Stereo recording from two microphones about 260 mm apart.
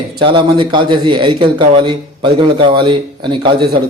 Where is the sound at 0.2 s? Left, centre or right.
Centre.